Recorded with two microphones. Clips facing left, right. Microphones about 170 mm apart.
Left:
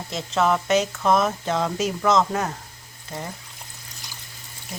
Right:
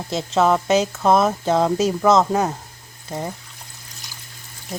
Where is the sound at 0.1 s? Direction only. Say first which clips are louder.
Right 4 dB; 30° right (ahead or behind).